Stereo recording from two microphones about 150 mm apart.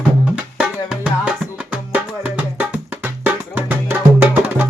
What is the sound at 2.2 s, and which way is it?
Music, 10° right (ahead or behind).